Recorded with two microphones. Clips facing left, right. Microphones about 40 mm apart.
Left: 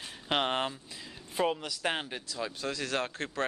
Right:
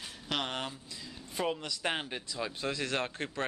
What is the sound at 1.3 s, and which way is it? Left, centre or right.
Speech, centre.